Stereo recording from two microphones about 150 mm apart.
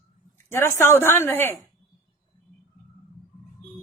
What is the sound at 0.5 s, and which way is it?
A woman's voice, 15° left (ahead or behind).